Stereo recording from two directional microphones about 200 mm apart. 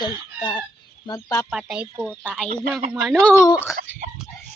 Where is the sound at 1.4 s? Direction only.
5° right (ahead or behind); by 3.7 s 15° left (ahead or behind).